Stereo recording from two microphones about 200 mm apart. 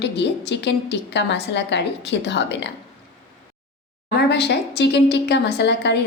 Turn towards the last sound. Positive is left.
turn(degrees=60)  # may be behind; listen again after turning